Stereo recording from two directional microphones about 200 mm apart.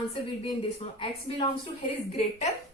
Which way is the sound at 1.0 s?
25° left (ahead or behind).